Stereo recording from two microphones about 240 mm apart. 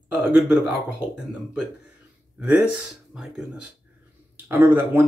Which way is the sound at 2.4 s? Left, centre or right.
Centre.